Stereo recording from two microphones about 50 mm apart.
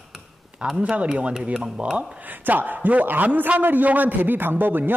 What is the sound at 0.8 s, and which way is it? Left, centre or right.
Speech, right.